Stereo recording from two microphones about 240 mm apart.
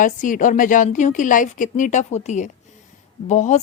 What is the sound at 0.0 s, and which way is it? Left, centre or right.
A woman's voice, left.